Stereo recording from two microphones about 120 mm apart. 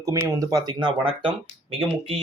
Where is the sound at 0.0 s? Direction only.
30° right (ahead or behind).